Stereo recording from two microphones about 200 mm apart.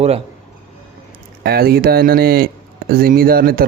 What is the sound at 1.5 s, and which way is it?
Speech, 50° right (ahead or behind).